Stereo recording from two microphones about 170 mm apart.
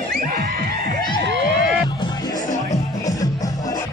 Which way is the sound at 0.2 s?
50° right (ahead or behind).